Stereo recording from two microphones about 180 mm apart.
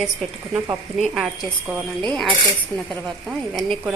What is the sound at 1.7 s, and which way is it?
A woman's voice, centre (ahead or behind).